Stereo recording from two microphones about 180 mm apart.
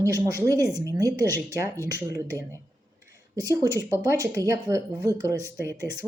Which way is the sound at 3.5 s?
20° right (ahead or behind).